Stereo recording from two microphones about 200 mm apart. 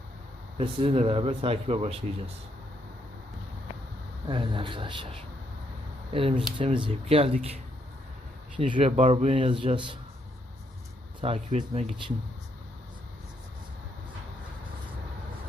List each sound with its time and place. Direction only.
0.6 s speech: 30° right (ahead or behind)
4.3 s speech: 25° right (ahead or behind)
6.1 s speech: 25° right (ahead or behind)
8.7 s a man's voice: 30° right (ahead or behind)
11.2 s a man's voice: 35° right (ahead or behind)